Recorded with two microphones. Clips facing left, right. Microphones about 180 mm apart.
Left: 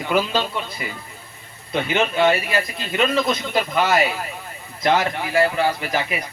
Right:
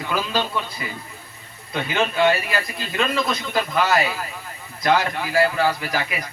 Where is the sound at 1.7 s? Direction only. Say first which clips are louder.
Left 2 dB; 20° left (ahead or behind).